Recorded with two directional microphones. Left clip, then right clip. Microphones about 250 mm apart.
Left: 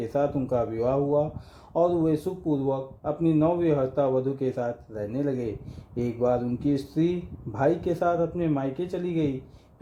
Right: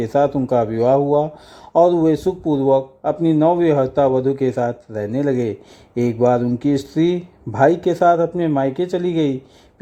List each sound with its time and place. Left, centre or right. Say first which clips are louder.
0.0 s speech: right 9 dB; right